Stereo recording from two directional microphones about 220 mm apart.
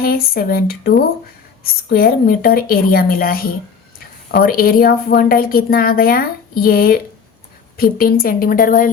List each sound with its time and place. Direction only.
0.0 s a woman's voice: 45° left (ahead or behind)